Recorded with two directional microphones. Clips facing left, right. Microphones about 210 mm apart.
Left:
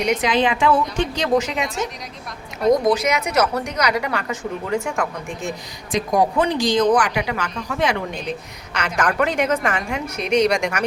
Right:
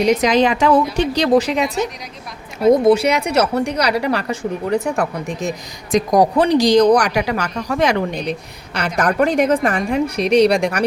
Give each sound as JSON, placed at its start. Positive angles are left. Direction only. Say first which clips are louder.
{"t": 0.0, "sound": "a woman's voice", "louder": "right 5 dB", "side_deg": -40}
{"t": 2.7, "sound": "a woman's voice", "louder": "right 5 dB", "side_deg": -25}